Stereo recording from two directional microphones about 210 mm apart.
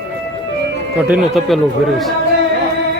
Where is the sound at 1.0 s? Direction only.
5° right (ahead or behind).